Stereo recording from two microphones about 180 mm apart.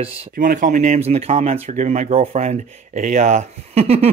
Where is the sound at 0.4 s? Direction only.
50° right (ahead or behind).